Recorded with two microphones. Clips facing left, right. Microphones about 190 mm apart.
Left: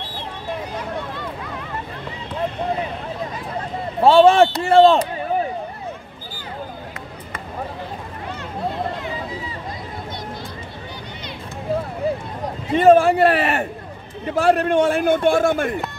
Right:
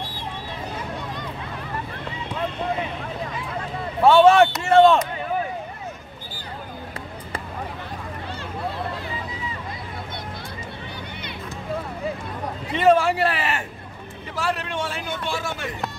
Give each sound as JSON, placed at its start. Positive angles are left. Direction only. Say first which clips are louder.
{"t": 4.0, "sound": "speech", "louder": "left 2 dB", "side_deg": 30}
{"t": 12.7, "sound": "a sound", "louder": "left 5 dB", "side_deg": 50}
{"t": 14.3, "sound": "a man's voice", "louder": "left 11 dB", "side_deg": 55}